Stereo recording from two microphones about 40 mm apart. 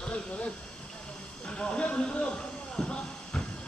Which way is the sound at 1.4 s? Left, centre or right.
Left.